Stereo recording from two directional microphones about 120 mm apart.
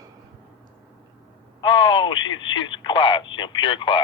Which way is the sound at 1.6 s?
45° left (ahead or behind).